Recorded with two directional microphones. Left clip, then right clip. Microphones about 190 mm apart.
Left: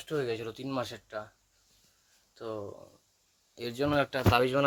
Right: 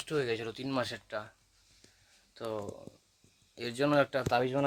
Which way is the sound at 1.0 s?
30° right (ahead or behind).